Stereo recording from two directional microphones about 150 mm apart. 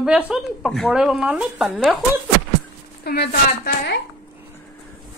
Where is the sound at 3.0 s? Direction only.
90° left.